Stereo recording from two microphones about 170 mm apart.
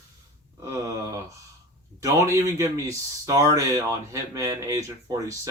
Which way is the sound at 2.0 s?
20° right (ahead or behind).